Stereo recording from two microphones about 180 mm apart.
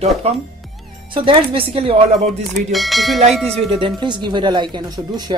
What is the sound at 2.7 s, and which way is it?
Speech, centre (ahead or behind).